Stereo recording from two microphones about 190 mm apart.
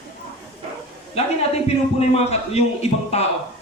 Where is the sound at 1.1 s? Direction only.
35° left (ahead or behind).